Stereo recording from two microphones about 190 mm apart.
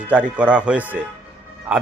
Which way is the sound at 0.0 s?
5° right (ahead or behind).